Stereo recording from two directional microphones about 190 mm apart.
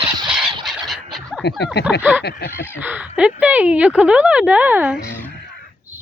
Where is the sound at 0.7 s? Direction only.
Centre (ahead or behind).